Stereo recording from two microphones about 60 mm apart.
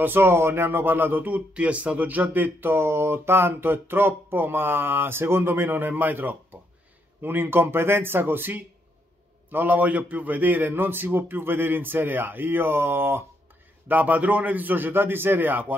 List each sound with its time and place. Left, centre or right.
0.0 s speech: right
13.8 s a man's voice: right